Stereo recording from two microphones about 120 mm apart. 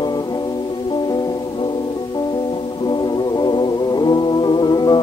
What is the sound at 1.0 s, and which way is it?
Music, 35° left (ahead or behind).